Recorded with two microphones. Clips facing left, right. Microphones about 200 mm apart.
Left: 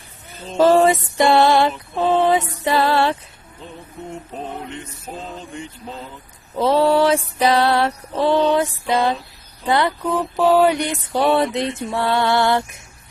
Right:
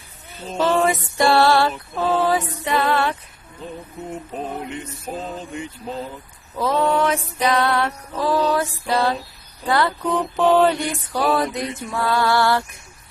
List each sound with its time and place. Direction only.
0.5 s a sound: 40° left (ahead or behind)
1.1 s music: 20° left (ahead or behind)
4.4 s music: 10° right (ahead or behind)
6.6 s music: 30° left (ahead or behind)
10.0 s mantra: 5° left (ahead or behind)
10.8 s music: 25° left (ahead or behind)